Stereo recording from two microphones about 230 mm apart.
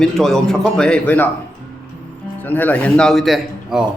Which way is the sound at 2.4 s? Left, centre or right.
Centre.